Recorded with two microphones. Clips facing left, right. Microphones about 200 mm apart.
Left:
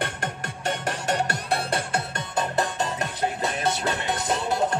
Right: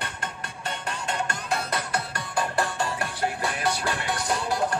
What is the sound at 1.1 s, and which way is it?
Music, 35° left (ahead or behind).